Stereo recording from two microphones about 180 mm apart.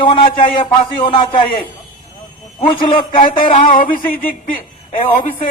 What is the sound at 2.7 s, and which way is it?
Speech, 45° left (ahead or behind).